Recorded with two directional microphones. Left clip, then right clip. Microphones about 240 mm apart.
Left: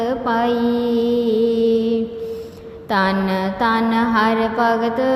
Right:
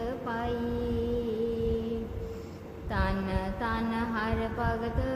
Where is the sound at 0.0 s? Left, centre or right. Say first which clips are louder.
Left 15 dB; left.